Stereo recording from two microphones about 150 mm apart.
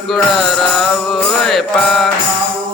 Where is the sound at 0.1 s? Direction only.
Centre (ahead or behind).